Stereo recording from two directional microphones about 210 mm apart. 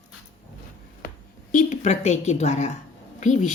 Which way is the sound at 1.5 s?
35° left (ahead or behind).